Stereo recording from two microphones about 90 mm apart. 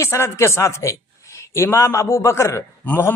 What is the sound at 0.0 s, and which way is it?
A man's voice, 30° left (ahead or behind).